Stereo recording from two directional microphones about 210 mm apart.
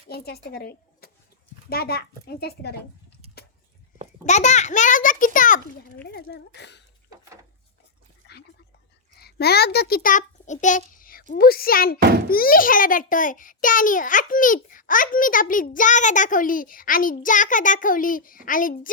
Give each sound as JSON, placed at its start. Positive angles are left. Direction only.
{"t": 0.1, "sound": "a child's voice", "side_deg": 45}
{"t": 4.3, "sound": "a child's voice", "side_deg": 35}
{"t": 6.1, "sound": "a child's voice", "side_deg": 50}
{"t": 8.2, "sound": "a sound", "side_deg": 55}
{"t": 9.1, "sound": "a child's voice", "side_deg": 50}
{"t": 11.9, "sound": "a child's voice", "side_deg": -50}
{"t": 12.3, "sound": "a child's voice", "side_deg": 45}